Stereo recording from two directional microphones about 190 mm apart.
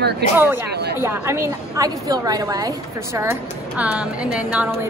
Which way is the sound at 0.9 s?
15° right (ahead or behind).